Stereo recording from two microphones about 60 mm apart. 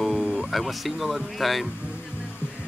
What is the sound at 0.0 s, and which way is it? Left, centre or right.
Speech, centre.